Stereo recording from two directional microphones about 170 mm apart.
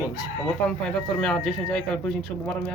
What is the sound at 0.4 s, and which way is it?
Speech, 5° left (ahead or behind).